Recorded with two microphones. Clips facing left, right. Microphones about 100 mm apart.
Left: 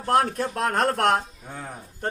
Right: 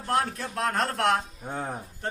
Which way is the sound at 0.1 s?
50° left (ahead or behind).